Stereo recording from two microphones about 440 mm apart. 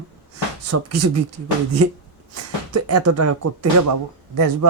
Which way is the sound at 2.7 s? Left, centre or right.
Right.